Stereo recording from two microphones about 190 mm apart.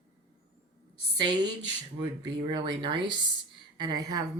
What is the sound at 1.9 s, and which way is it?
Speech, 20° right (ahead or behind).